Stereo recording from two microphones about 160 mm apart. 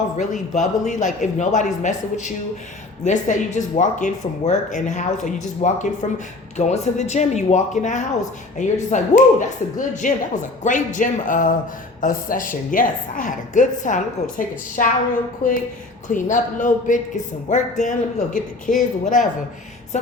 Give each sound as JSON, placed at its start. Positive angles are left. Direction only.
{"t": 0.5, "sound": "a woman's voice", "side_deg": 50}